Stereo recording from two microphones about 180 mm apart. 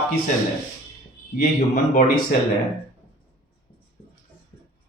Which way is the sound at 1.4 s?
50° left (ahead or behind).